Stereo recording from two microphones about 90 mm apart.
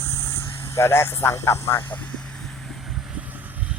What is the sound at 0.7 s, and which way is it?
Speech, 30° left (ahead or behind).